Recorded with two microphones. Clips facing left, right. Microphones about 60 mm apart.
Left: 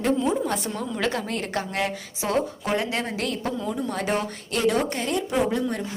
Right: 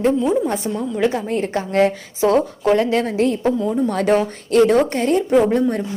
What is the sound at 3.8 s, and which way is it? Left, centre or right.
Speech, right.